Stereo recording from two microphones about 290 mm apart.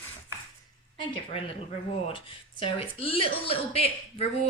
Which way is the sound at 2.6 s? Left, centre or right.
Centre.